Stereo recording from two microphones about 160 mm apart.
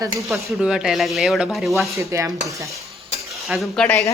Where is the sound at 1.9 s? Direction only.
20° right (ahead or behind).